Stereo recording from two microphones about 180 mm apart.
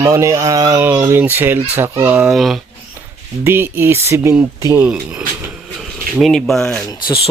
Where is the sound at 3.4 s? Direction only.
10° right (ahead or behind).